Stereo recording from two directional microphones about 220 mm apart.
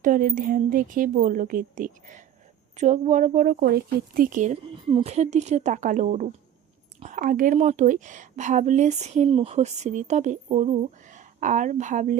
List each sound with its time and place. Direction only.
0.0 s a woman's voice: 40° right (ahead or behind)